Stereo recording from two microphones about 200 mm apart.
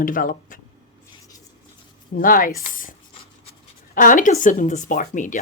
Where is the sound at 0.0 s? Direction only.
45° left (ahead or behind).